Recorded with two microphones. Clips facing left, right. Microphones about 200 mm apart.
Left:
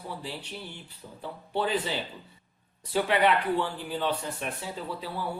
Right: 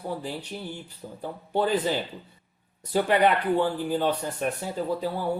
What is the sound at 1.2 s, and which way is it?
Speech, 45° right (ahead or behind).